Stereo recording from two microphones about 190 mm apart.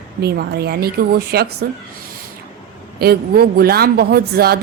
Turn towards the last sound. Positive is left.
turn(degrees=-55)  # may be behind; listen again after turning